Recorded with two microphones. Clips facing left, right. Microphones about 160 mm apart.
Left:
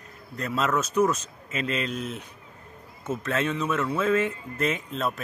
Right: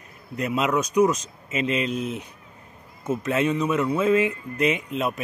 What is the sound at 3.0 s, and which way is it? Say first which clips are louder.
Speech: right 4 dB; 15° right (ahead or behind).